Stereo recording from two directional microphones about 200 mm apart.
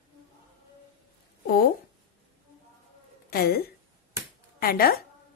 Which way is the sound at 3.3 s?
50° left (ahead or behind).